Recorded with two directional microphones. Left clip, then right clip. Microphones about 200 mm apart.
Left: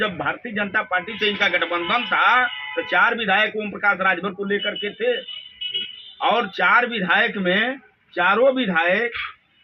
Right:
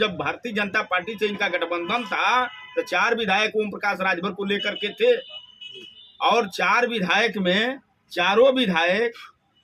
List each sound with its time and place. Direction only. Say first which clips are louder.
0.0 s speech: left 1 dB; 30° right (ahead or behind)
6.2 s speech: left 2 dB; 25° right (ahead or behind)